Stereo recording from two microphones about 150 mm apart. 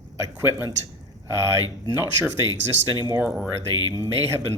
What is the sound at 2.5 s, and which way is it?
Speech, 30° left (ahead or behind).